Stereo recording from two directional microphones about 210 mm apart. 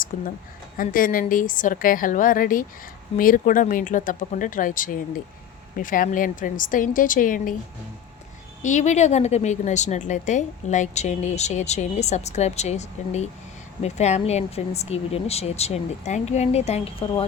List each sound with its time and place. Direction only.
0.1 s a woman's voice: 40° left (ahead or behind)
8.6 s a woman's voice: 35° left (ahead or behind)